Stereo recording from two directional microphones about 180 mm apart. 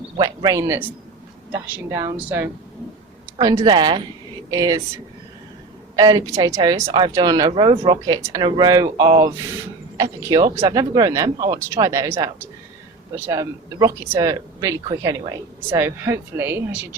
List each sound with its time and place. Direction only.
0.2 s speech: 20° right (ahead or behind)
6.0 s speech: 20° right (ahead or behind)